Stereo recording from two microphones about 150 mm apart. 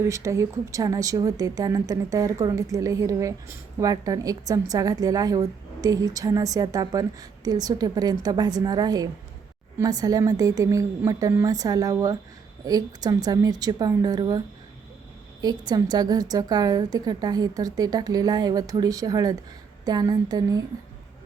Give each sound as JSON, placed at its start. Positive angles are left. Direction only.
{"t": 0.0, "sound": "speech", "side_deg": -20}